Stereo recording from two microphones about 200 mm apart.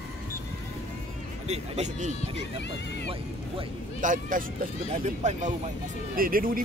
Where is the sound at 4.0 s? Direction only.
40° right (ahead or behind).